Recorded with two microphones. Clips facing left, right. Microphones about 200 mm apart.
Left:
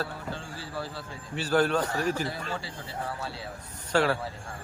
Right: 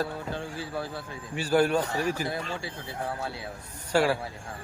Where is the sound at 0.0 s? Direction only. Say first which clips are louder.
Right 3 dB; 15° right (ahead or behind).